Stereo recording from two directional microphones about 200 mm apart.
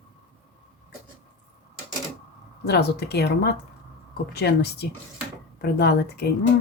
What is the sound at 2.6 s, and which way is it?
A woman's voice, 55° left (ahead or behind).